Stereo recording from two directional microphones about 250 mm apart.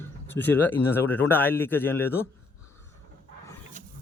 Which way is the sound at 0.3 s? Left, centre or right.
Centre.